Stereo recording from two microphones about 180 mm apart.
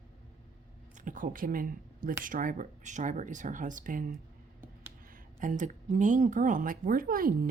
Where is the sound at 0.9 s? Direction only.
45° right (ahead or behind).